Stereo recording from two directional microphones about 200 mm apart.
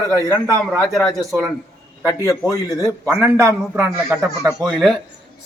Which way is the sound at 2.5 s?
15° left (ahead or behind).